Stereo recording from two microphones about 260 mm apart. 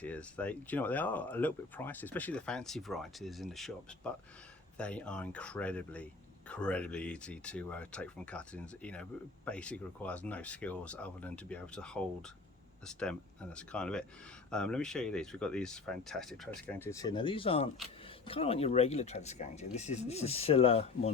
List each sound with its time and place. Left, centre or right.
0.0 s speech: centre; by 21.1 s left